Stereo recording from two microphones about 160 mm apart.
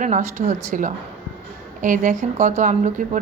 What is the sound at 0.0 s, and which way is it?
A woman's voice, 45° right (ahead or behind).